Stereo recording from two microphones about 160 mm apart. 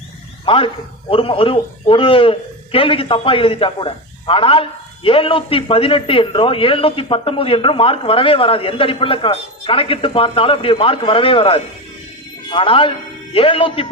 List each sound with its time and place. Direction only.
0.4 s a man's voice: 35° left (ahead or behind)